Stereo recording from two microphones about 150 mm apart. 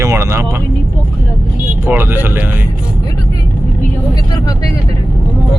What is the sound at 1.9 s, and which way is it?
Speech, 15° right (ahead or behind).